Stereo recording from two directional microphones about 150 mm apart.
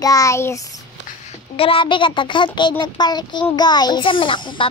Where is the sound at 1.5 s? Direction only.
35° left (ahead or behind).